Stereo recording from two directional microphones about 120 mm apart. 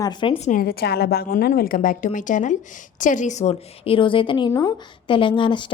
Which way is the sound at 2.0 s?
90° left.